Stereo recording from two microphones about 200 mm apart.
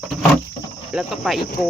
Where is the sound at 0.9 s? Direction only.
Centre (ahead or behind).